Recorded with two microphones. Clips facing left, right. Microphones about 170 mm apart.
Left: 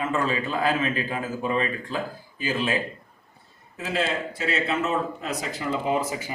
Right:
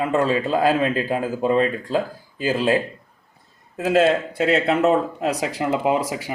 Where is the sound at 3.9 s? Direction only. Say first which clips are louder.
Right 10 dB; 50° right (ahead or behind).